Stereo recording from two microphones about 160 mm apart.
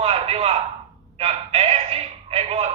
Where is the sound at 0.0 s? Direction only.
40° right (ahead or behind).